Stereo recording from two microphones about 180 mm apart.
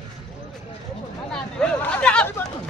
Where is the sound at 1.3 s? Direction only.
5° left (ahead or behind).